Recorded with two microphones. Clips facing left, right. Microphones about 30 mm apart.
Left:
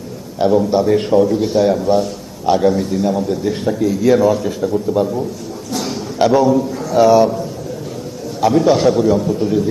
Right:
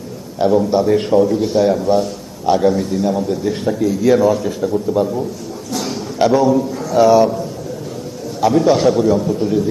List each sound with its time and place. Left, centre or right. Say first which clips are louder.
0.3 s a man's voice: even; centre
5.7 s a sound: left 1 dB; centre
8.4 s a man's voice: even; centre